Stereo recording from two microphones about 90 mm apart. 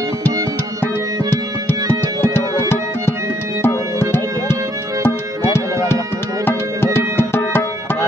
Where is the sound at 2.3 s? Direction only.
25° left (ahead or behind).